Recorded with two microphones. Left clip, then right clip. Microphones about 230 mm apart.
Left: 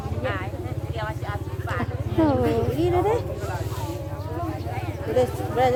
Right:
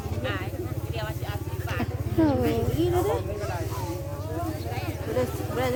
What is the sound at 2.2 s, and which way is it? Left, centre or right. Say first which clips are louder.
Speech: left 3 dB; centre.